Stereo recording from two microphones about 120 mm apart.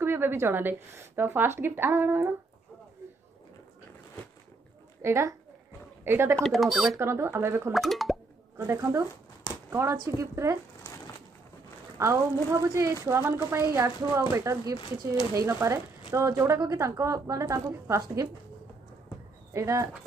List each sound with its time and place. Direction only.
0.0 s speech: 20° right (ahead or behind)
5.0 s a woman's voice: 20° right (ahead or behind)
6.4 s speech: centre (ahead or behind)
7.0 s speech: 20° right (ahead or behind)
7.7 s speech: centre (ahead or behind)
8.5 s speech: 25° right (ahead or behind)
12.0 s speech: 25° right (ahead or behind)
19.5 s speech: 25° right (ahead or behind)